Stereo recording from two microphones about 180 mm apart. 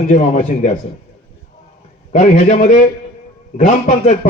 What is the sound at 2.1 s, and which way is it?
A man's voice, 40° left (ahead or behind).